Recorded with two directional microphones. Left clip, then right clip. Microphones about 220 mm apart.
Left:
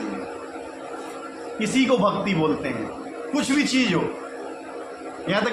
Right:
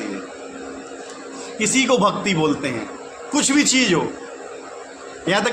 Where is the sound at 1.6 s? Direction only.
55° right (ahead or behind).